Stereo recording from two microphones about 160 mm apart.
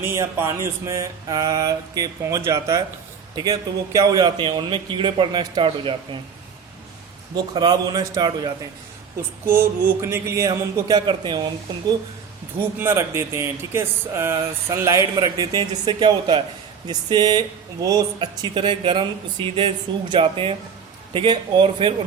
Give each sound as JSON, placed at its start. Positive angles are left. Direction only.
{"t": 0.0, "sound": "mantra", "side_deg": -15}
{"t": 7.3, "sound": "mantra", "side_deg": -25}
{"t": 9.5, "sound": "mantra", "side_deg": -15}
{"t": 12.8, "sound": "speech", "side_deg": -15}
{"t": 16.8, "sound": "mantra", "side_deg": -25}
{"t": 19.5, "sound": "speech", "side_deg": -30}